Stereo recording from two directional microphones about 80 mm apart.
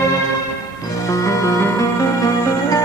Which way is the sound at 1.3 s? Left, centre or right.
Left.